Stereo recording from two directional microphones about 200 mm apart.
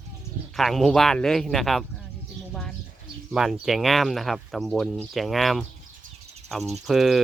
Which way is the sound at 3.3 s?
Centre (ahead or behind).